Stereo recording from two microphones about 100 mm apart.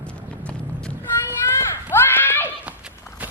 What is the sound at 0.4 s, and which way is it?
Clip-clop, 10° left (ahead or behind).